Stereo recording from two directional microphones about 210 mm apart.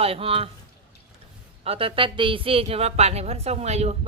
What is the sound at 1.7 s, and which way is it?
A woman's voice, 25° right (ahead or behind).